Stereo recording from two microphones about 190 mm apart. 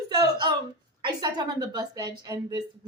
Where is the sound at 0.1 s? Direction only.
20° right (ahead or behind).